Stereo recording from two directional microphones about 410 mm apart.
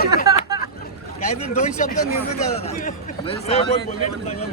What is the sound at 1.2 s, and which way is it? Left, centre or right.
A man's voice, centre.